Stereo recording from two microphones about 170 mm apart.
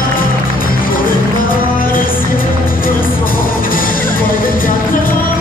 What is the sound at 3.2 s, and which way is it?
Music, 55° left (ahead or behind).